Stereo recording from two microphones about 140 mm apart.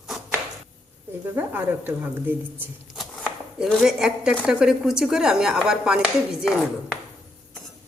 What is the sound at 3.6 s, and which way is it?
A woman's voice, 5° right (ahead or behind).